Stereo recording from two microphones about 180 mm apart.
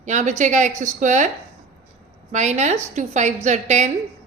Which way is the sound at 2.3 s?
40° right (ahead or behind).